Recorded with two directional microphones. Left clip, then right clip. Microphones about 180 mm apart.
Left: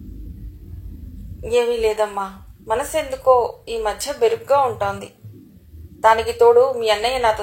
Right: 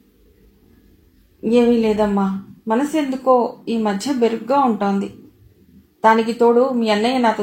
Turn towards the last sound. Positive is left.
turn(degrees=35)  # may be behind; listen again after turning